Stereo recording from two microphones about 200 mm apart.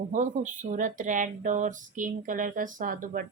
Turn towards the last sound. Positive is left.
turn(degrees=-40)  # may be behind; listen again after turning